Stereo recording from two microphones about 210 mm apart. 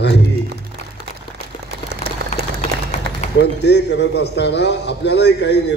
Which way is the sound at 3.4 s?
55° left (ahead or behind).